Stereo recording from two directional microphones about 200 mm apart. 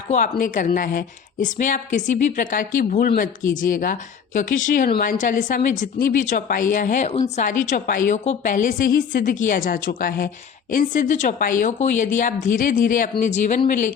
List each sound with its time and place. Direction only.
0.1 s a woman's voice: 40° left (ahead or behind)